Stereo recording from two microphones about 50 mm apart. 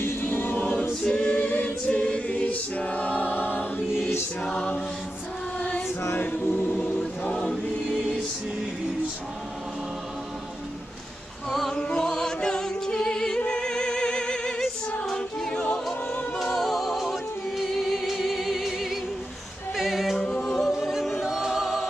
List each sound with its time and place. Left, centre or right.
0.0 s choir: left
0.6 s choir: left
1.0 s a capella: left
4.5 s a capella: centre
6.1 s a capella: left
7.2 s choir: left
11.7 s music: centre
15.0 s choir: centre
16.4 s music: centre
19.7 s a capella: centre
20.4 s music: centre
21.2 s choir: centre